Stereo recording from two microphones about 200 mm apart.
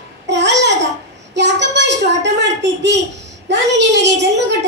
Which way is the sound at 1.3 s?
60° right (ahead or behind).